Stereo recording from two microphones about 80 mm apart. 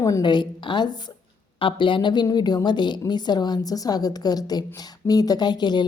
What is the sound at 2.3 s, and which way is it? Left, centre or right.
A woman's voice, left.